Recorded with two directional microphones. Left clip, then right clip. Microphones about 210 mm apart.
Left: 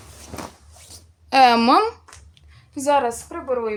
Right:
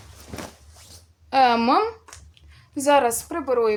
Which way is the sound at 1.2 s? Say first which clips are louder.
Left 4 dB; 35° left (ahead or behind).